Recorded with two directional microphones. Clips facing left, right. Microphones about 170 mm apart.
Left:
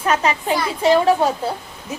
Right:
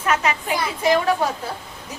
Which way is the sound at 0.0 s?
35° left (ahead or behind).